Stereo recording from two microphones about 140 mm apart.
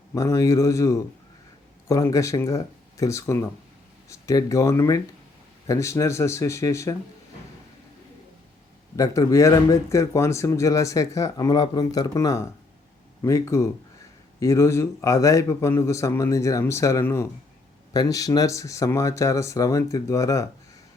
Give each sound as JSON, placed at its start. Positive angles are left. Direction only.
{"t": 0.1, "sound": "speech", "side_deg": 20}
{"t": 9.0, "sound": "speech", "side_deg": 20}